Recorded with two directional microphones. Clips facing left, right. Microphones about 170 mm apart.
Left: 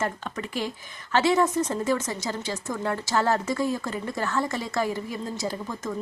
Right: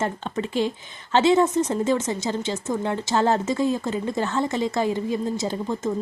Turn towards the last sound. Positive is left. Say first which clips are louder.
# right 5 dB
turn(degrees=-25)  # may be behind; listen again after turning